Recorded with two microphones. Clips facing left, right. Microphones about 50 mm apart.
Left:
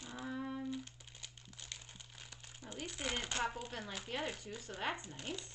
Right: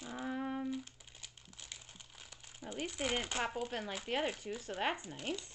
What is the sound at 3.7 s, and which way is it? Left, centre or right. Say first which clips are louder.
Speech: right 5 dB; right.